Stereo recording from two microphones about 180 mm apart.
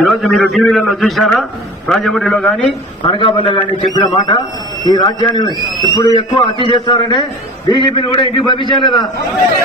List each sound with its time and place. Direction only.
0.0 s a man's voice: centre (ahead or behind)
3.0 s a man's voice: 30° left (ahead or behind)